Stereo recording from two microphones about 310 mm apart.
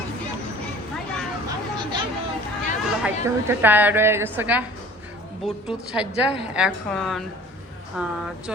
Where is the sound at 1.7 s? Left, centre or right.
Centre.